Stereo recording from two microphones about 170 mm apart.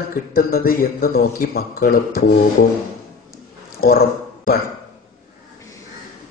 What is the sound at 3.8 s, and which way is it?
Speech, 60° left (ahead or behind).